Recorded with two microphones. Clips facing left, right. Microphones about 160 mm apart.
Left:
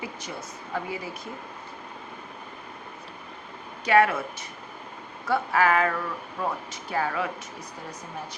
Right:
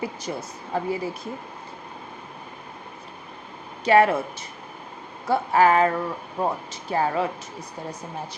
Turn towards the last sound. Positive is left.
turn(degrees=-30)  # may be behind; listen again after turning